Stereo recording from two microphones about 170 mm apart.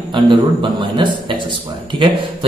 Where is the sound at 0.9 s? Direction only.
30° right (ahead or behind).